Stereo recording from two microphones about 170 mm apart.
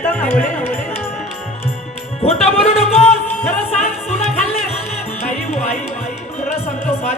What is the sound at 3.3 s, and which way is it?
Music, 10° left (ahead or behind).